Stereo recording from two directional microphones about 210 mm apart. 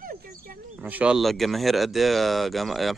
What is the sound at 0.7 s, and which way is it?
Speech, 5° right (ahead or behind).